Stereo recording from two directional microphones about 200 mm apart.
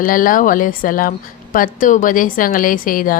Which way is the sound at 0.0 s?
45° left (ahead or behind).